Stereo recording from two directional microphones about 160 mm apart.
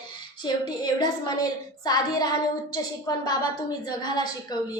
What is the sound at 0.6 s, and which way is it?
A woman's voice, 25° left (ahead or behind).